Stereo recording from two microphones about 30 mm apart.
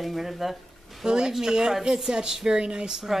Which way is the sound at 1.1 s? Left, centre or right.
Right.